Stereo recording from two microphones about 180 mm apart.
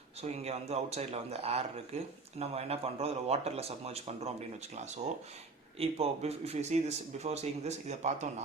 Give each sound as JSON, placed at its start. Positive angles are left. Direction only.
{"t": 0.2, "sound": "speech", "side_deg": -35}
{"t": 5.8, "sound": "speech", "side_deg": -35}